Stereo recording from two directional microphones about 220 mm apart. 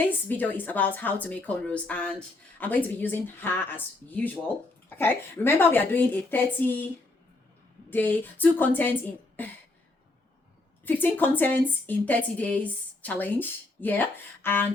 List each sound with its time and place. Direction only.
0.1 s a woman's voice: 10° left (ahead or behind)
10.8 s a woman's voice: 10° left (ahead or behind)